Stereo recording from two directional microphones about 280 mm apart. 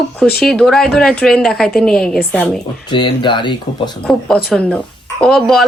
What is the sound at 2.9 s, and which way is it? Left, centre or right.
Speech, centre.